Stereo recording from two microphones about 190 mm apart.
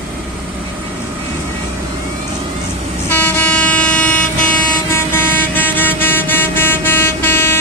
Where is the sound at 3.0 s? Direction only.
10° left (ahead or behind).